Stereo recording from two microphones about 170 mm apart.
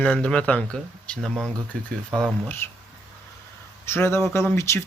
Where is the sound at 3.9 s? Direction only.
15° left (ahead or behind).